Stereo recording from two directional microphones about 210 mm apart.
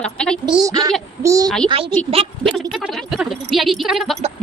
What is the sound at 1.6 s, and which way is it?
Speech, 25° right (ahead or behind).